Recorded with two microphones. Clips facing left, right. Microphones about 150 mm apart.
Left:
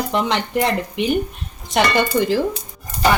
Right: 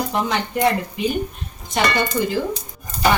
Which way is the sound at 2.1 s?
90° left.